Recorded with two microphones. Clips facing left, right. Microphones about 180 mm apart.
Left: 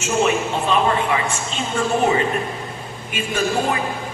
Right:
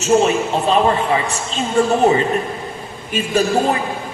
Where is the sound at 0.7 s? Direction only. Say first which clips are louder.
Right 3 dB; 35° right (ahead or behind).